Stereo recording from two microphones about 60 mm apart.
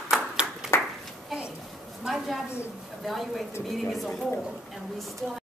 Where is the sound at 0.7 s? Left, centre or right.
Left.